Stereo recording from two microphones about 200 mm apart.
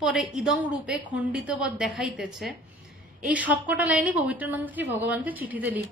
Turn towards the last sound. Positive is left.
turn(degrees=-10)  # may be behind; listen again after turning